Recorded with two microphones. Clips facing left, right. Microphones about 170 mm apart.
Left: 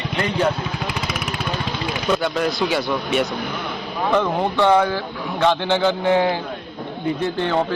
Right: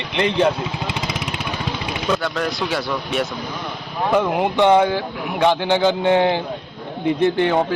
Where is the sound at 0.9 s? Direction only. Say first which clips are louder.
Even; 25° right (ahead or behind).